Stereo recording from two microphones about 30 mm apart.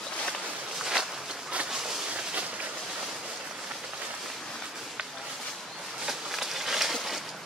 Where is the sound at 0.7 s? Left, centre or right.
Centre.